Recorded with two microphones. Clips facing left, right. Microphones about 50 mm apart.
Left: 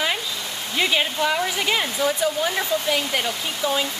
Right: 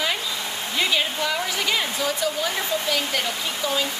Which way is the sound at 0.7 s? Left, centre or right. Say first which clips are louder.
Left 2 dB; centre.